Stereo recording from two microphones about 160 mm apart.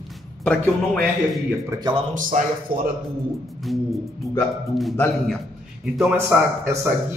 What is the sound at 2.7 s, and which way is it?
Speech, 65° right (ahead or behind).